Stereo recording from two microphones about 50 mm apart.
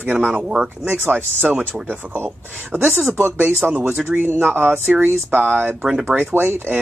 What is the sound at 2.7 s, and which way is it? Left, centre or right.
A man's voice, right.